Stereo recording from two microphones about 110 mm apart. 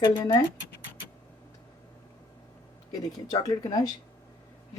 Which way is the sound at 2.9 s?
35° left (ahead or behind).